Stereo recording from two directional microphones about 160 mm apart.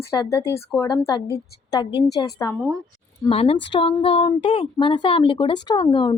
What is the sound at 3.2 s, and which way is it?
A woman's voice, 35° left (ahead or behind).